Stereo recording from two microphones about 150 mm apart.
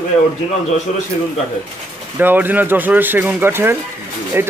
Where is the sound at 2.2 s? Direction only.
15° right (ahead or behind).